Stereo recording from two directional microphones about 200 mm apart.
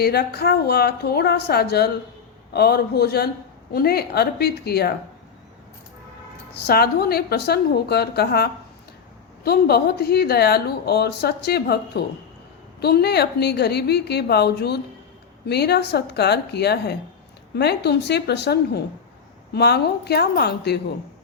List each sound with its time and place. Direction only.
0.0 s speech: 50° left (ahead or behind)
6.6 s a woman's voice: 50° left (ahead or behind)